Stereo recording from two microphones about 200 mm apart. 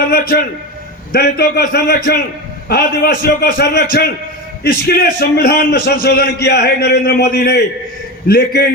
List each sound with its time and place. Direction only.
0.1 s a man's voice: 50° left (ahead or behind)